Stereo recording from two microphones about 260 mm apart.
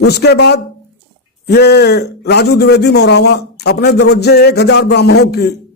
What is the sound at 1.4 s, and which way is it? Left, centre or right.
A man's voice, left.